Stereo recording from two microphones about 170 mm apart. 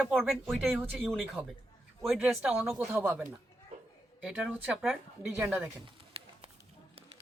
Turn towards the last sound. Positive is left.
turn(degrees=-35)  # may be behind; listen again after turning